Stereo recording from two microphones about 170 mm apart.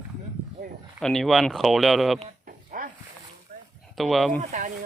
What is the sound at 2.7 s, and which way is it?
Dog, 50° right (ahead or behind).